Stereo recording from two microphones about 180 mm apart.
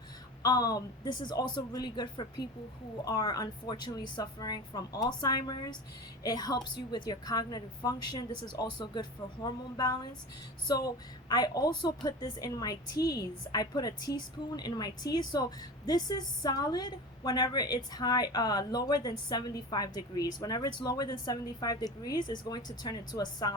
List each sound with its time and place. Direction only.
0.4 s a woman's voice: 20° left (ahead or behind)